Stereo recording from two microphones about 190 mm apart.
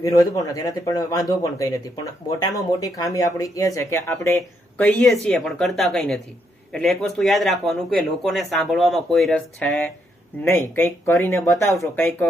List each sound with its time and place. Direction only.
0.0 s speech: 20° left (ahead or behind)